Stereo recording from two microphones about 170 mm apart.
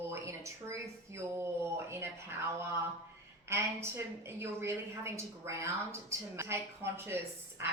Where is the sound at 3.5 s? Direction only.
15° right (ahead or behind).